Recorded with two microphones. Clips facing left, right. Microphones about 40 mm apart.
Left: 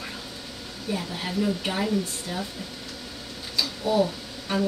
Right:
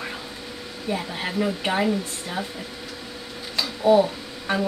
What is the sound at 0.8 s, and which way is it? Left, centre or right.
Speech, right.